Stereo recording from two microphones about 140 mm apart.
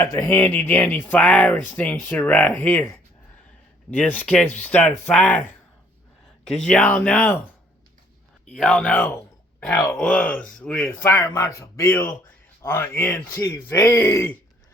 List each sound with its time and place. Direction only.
0.0 s speech: 20° left (ahead or behind)
8.4 s speech: 10° left (ahead or behind)
10.0 s speech: 10° left (ahead or behind)